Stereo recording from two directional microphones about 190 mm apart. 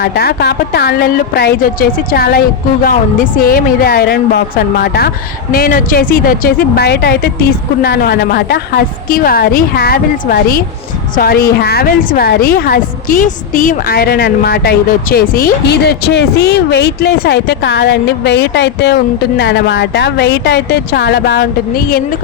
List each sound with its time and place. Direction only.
0.0 s a woman's voice: 55° left (ahead or behind)